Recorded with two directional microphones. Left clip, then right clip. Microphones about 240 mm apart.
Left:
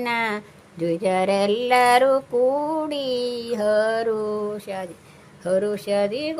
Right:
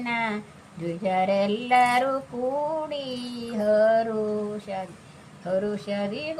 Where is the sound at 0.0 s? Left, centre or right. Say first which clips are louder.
Left 4 dB; left.